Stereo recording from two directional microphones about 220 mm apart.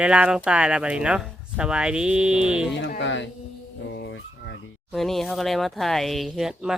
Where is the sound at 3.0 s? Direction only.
55° left (ahead or behind).